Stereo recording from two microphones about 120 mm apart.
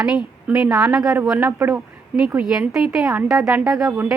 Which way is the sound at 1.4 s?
20° right (ahead or behind).